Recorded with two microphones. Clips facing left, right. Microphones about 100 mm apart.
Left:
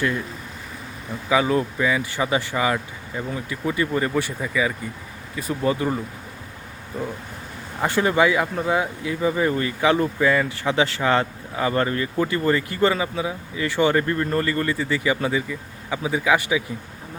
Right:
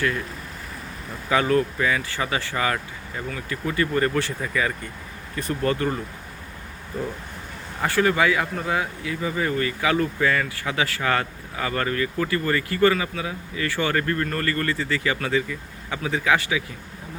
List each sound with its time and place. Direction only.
1.3 s speech: 10° left (ahead or behind)
7.8 s speech: 20° left (ahead or behind)